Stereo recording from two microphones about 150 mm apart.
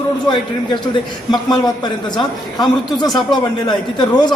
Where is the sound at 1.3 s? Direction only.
30° left (ahead or behind).